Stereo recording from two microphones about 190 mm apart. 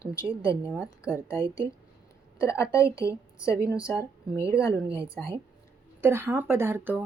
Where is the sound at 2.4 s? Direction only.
15° left (ahead or behind).